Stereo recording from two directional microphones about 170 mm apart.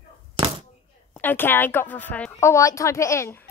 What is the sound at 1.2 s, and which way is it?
Speech, 10° left (ahead or behind).